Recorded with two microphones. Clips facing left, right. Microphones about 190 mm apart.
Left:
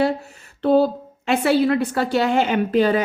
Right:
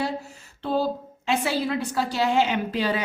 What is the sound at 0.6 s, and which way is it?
A woman's voice, 60° left (ahead or behind).